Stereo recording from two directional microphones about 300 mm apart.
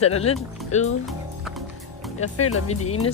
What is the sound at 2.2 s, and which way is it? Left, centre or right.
Speech, left.